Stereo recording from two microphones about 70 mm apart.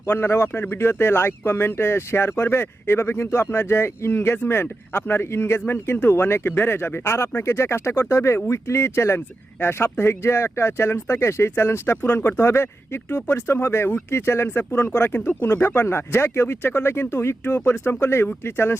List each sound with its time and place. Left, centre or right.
0.1 s speech: left